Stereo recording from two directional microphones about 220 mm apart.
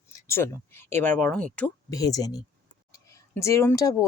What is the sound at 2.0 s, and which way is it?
Speech, 15° left (ahead or behind).